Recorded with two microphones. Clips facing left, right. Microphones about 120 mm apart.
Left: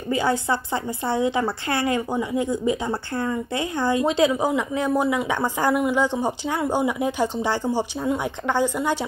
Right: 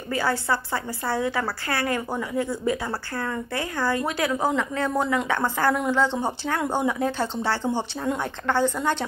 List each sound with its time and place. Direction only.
0.1 s a woman's voice: 20° left (ahead or behind)